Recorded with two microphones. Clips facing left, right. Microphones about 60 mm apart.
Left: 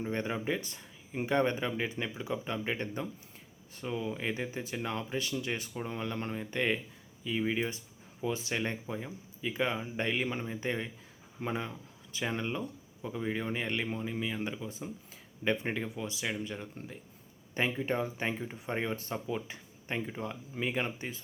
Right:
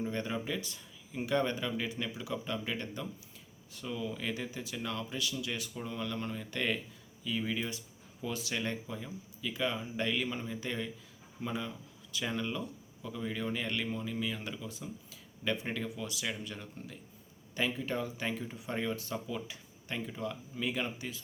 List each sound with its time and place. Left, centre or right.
0.0 s speech: left